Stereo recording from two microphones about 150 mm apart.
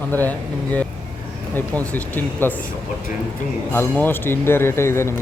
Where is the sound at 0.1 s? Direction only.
10° left (ahead or behind).